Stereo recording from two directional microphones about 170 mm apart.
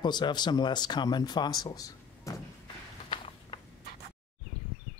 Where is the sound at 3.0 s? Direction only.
30° left (ahead or behind).